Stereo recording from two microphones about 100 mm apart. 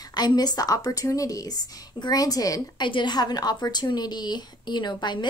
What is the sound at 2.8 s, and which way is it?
Speech, 50° left (ahead or behind).